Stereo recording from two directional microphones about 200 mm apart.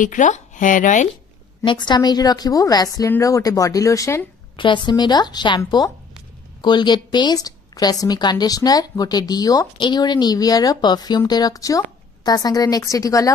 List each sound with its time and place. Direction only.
0.0 s speech: 40° left (ahead or behind)
1.6 s a woman's voice: 25° left (ahead or behind)